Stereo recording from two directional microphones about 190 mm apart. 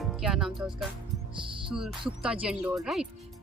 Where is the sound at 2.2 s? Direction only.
5° right (ahead or behind).